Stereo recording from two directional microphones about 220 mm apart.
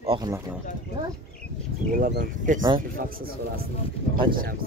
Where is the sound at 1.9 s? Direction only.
40° right (ahead or behind).